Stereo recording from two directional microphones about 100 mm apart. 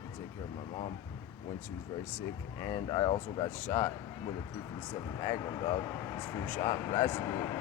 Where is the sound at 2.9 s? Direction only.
45° left (ahead or behind).